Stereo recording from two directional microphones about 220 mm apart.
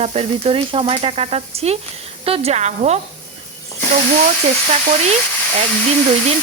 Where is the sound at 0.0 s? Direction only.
30° right (ahead or behind).